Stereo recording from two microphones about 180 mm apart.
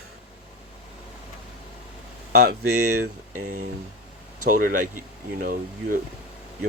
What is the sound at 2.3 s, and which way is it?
Speech, 65° right (ahead or behind).